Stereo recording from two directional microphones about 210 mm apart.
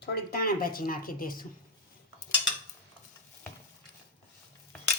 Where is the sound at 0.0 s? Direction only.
45° left (ahead or behind).